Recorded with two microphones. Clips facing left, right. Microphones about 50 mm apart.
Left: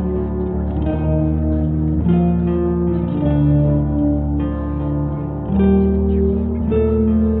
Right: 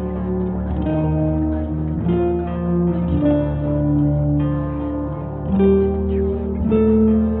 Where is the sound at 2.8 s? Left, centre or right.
Centre.